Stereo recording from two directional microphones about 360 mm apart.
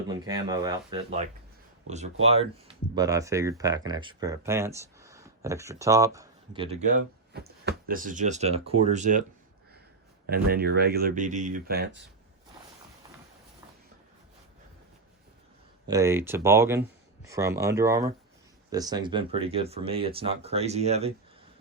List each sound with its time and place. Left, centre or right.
0.1 s speech: centre
7.3 s speech: right
10.2 s speech: right
15.9 s speech: centre